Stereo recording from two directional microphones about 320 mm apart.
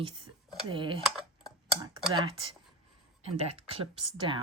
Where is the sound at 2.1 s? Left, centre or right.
Centre.